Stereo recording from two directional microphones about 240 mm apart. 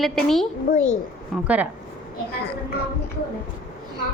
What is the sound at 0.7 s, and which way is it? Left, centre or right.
Speech, left.